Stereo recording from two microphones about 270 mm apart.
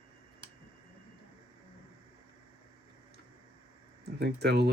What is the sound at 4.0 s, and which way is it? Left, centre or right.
Speech, right.